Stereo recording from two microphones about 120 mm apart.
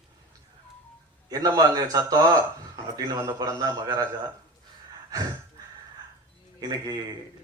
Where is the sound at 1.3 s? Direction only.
30° right (ahead or behind).